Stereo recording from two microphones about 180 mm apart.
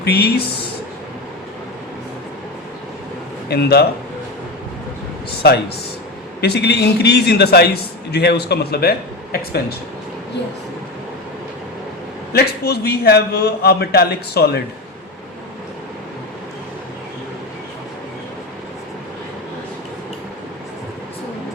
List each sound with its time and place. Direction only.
0.0 s a man's voice: 60° left (ahead or behind)
3.5 s a man's voice: 60° left (ahead or behind)
6.4 s a man's voice: 65° left (ahead or behind)
12.3 s a man's voice: 60° left (ahead or behind)